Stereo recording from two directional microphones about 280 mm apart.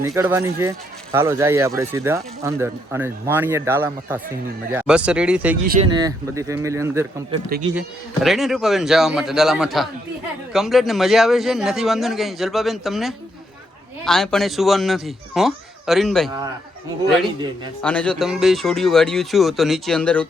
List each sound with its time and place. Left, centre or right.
0.0 s a man's voice: centre
5.6 s speech: right
5.9 s a man's voice: centre
17.8 s a man's voice: centre